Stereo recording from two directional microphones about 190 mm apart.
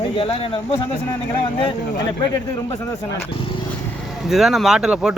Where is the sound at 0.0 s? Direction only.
30° left (ahead or behind).